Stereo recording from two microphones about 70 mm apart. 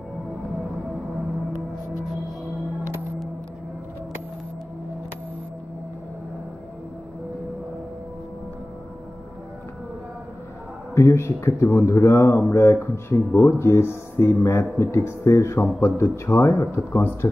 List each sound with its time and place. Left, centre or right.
11.0 s speech: left